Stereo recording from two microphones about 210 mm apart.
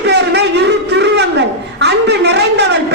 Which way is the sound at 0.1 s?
55° right (ahead or behind).